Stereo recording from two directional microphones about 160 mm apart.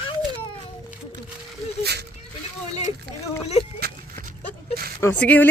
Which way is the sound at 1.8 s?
90° right.